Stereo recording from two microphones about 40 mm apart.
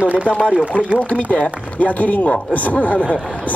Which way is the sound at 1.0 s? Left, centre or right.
Left.